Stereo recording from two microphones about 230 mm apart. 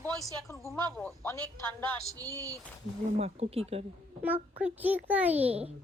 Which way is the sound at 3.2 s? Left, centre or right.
Right.